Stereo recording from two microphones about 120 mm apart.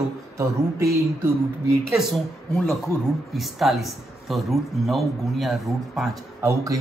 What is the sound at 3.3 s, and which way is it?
Speech, centre (ahead or behind).